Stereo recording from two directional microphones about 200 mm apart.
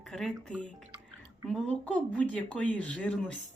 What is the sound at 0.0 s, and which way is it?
Speech, 5° left (ahead or behind).